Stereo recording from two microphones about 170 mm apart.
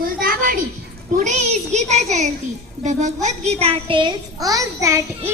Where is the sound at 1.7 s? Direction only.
45° right (ahead or behind).